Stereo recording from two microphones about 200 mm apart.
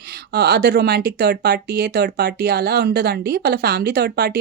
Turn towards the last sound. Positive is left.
turn(degrees=-50)  # may be behind; listen again after turning